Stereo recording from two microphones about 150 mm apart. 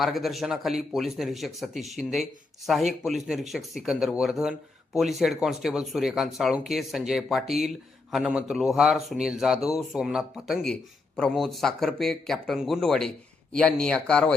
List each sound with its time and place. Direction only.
0.0 s speech: centre (ahead or behind)